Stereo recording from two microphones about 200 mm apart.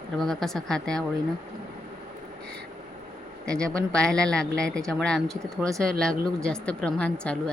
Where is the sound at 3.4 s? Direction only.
5° left (ahead or behind).